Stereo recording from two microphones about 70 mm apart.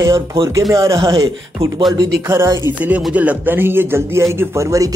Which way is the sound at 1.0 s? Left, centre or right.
Right.